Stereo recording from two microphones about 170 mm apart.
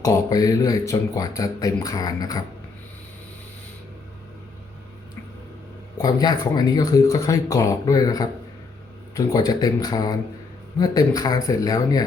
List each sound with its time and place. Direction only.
0.0 s speech: 20° left (ahead or behind)
6.0 s speech: 25° left (ahead or behind)